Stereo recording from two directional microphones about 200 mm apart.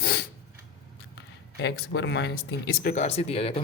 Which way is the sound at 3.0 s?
30° left (ahead or behind).